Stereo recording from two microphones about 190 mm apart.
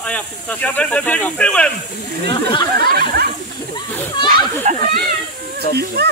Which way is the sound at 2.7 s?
55° right (ahead or behind).